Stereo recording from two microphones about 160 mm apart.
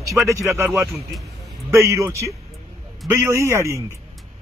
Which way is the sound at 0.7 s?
Centre (ahead or behind).